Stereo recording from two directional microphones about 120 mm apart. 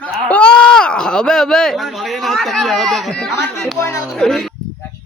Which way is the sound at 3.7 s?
25° left (ahead or behind).